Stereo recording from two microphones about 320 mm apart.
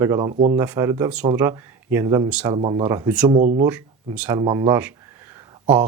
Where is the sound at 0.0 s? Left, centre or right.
Centre.